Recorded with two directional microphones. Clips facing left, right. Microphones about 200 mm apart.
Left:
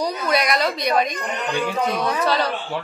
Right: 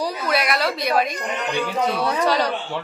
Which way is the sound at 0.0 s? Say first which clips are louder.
Left 1 dB; 5° right (ahead or behind).